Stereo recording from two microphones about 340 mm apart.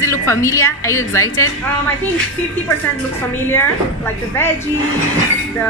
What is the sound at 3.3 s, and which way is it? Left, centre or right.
A woman's voice, centre.